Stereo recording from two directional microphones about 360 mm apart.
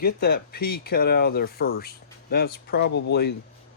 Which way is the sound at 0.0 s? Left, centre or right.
Left.